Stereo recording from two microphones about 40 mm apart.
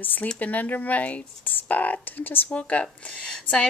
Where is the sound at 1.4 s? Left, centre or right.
Left.